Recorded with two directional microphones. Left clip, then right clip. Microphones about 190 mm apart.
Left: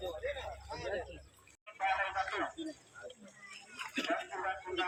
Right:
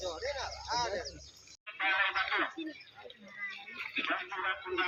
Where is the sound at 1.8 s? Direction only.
65° left (ahead or behind).